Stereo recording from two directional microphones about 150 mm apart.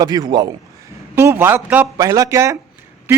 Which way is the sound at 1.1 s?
15° right (ahead or behind).